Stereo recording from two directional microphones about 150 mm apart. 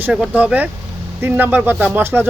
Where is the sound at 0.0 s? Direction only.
10° right (ahead or behind).